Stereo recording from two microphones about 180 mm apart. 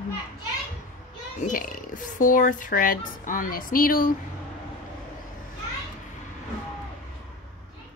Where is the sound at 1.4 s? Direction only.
45° left (ahead or behind).